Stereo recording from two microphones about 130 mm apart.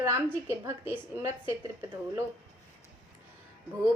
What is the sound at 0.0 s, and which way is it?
A woman's voice, 20° right (ahead or behind).